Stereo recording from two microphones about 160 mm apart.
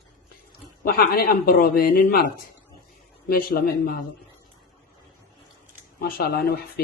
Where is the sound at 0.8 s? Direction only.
70° left (ahead or behind).